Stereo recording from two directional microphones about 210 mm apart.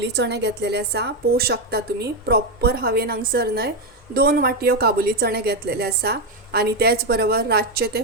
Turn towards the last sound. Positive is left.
turn(degrees=-45)  # may be behind; listen again after turning